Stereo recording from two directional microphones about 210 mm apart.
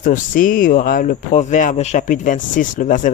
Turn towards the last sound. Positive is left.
turn(degrees=35)  # may be behind; listen again after turning